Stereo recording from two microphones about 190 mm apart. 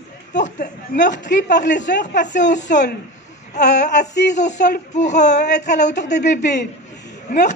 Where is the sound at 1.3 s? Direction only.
65° left (ahead or behind).